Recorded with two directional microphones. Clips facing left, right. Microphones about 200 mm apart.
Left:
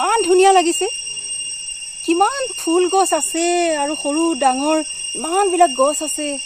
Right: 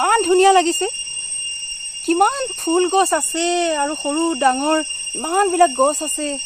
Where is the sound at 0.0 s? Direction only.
Centre (ahead or behind).